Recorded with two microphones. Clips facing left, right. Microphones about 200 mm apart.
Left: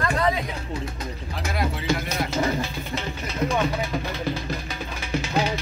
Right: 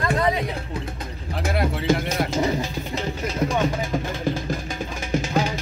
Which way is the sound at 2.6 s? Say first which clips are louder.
Right 2 dB; 40° right (ahead or behind).